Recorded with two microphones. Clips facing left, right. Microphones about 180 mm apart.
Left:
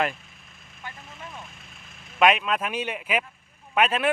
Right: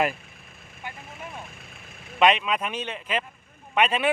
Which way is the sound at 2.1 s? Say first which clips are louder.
Even; centre (ahead or behind).